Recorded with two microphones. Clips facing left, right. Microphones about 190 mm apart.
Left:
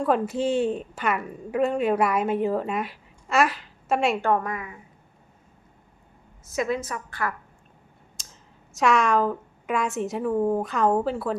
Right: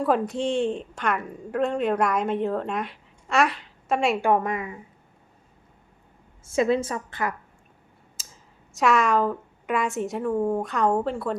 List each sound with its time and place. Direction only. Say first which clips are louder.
0.0 s a woman's voice: even; centre (ahead or behind)
4.2 s a woman's voice: right 2 dB; 15° right (ahead or behind)
6.4 s a woman's voice: right 5 dB; 30° right (ahead or behind)
8.1 s speech: right 1 dB; 5° right (ahead or behind)